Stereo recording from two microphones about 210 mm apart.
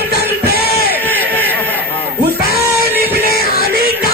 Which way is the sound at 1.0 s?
10° left (ahead or behind).